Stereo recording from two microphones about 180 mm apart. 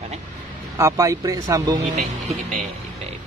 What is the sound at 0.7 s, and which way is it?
Speech, 15° right (ahead or behind).